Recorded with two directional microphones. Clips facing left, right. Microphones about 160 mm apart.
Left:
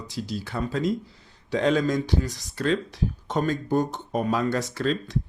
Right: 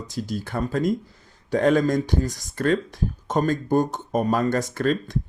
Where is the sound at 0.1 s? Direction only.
45° right (ahead or behind).